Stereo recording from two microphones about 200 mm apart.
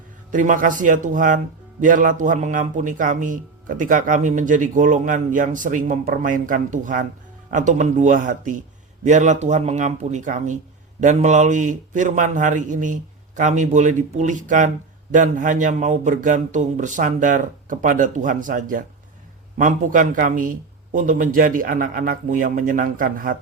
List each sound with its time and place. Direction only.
0.3 s a man's voice: 40° right (ahead or behind)